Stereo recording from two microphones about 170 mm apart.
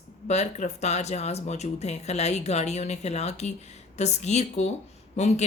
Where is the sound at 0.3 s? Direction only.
40° left (ahead or behind).